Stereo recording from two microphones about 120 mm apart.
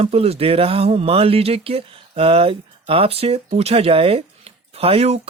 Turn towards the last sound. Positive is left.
turn(degrees=-55)  # may be behind; listen again after turning